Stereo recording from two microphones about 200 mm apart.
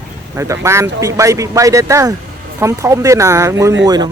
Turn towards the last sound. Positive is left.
turn(degrees=-20)  # may be behind; listen again after turning